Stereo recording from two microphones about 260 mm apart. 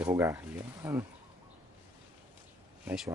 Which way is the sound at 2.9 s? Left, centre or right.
Centre.